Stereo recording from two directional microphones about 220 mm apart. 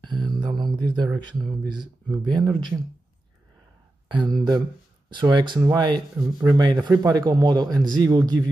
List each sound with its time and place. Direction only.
0.0 s mantra: 20° right (ahead or behind)
0.7 s speech: 20° right (ahead or behind)
4.1 s a man's voice: 20° right (ahead or behind)